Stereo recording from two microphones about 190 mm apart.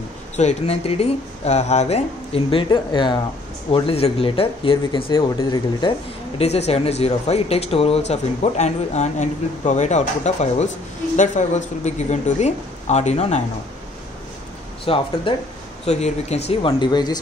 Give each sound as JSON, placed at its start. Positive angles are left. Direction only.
{"t": 0.4, "sound": "speech", "side_deg": 35}
{"t": 14.9, "sound": "speech", "side_deg": 30}